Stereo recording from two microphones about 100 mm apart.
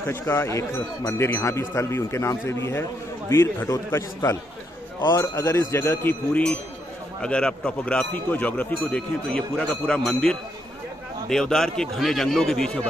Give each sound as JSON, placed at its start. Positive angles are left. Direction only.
{"t": 0.0, "sound": "a man's voice", "side_deg": 25}